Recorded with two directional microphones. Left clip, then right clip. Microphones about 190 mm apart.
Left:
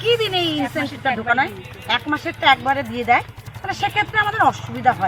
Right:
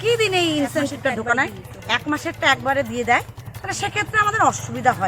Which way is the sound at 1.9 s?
20° right (ahead or behind).